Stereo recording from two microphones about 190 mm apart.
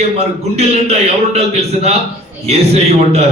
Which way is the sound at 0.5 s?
35° right (ahead or behind).